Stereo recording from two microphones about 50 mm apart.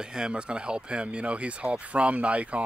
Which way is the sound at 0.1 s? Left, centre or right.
Centre.